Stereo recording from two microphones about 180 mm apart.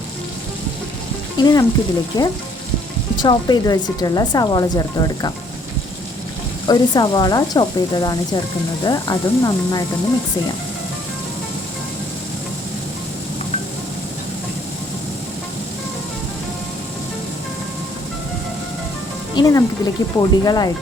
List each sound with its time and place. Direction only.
1.4 s speech: 20° left (ahead or behind)
6.7 s speech: 20° left (ahead or behind)
19.4 s speech: 20° left (ahead or behind)